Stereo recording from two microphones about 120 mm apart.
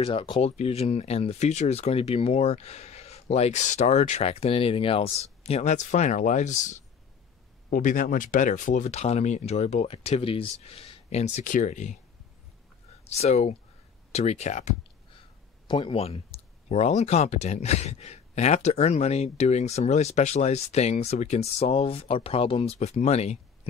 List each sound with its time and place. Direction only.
0.0 s speech: 45° left (ahead or behind); by 6.8 s 90° left
7.8 s speech: 90° left
13.0 s speech: 60° left (ahead or behind)
15.6 s speech: 45° left (ahead or behind); by 23.7 s 65° left (ahead or behind)